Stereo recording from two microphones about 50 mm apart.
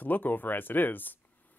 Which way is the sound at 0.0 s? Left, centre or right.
Left.